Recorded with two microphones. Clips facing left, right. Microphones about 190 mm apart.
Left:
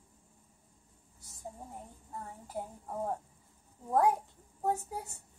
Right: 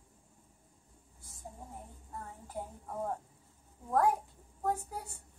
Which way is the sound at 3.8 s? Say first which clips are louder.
Left 1 dB; 15° left (ahead or behind).